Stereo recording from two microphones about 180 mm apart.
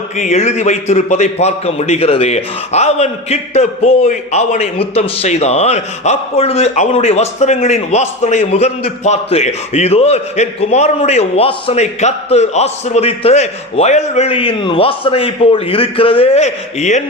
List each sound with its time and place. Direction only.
0.2 s a man's voice: 40° left (ahead or behind)